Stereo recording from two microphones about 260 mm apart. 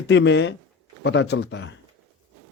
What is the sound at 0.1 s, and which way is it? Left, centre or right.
Speech, left.